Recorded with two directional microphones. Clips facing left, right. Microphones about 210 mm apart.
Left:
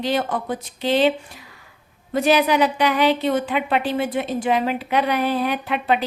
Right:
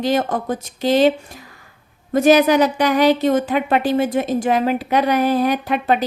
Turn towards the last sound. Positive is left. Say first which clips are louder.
# right 3 dB
turn(degrees=-40)  # may be behind; listen again after turning